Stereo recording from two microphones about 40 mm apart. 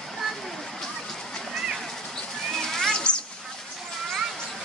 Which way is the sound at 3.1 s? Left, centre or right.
Left.